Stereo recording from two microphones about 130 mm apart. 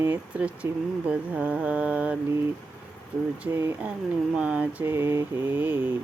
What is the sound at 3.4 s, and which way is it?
Speech, 15° right (ahead or behind).